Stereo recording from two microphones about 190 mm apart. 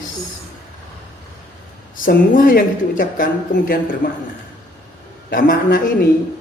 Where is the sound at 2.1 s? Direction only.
50° left (ahead or behind).